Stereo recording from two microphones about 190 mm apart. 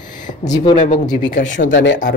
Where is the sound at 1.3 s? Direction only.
75° left (ahead or behind).